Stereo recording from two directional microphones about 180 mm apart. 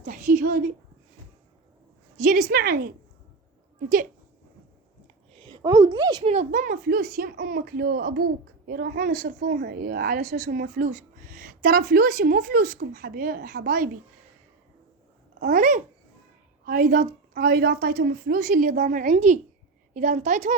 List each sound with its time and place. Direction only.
0.0 s a sound: 45° right (ahead or behind)
2.1 s a woman's voice: 50° right (ahead or behind)
5.3 s a woman's voice: 30° right (ahead or behind)
6.3 s a woman's voice: 45° right (ahead or behind)
15.4 s a woman's voice: 50° right (ahead or behind)